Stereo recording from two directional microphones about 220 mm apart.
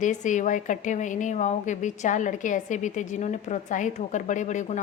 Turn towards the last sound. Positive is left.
turn(degrees=35)  # may be behind; listen again after turning